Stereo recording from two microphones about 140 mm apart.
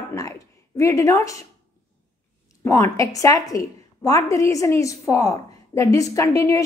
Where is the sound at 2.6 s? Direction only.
25° left (ahead or behind).